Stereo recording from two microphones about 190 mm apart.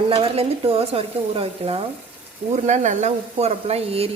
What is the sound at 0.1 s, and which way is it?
A woman's voice, 30° right (ahead or behind).